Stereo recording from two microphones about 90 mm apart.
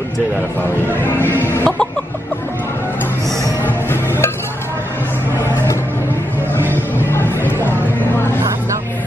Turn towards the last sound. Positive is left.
turn(degrees=25)  # may be behind; listen again after turning